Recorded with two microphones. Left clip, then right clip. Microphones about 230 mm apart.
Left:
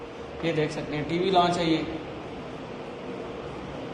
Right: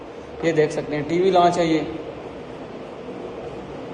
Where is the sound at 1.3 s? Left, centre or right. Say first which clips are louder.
Right 6 dB; right.